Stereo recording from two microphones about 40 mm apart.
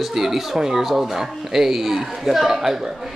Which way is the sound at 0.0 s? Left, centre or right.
Centre.